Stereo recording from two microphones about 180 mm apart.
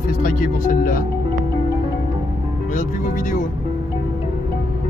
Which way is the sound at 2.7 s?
45° left (ahead or behind).